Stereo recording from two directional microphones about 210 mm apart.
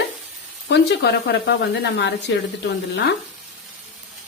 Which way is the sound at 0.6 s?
50° left (ahead or behind).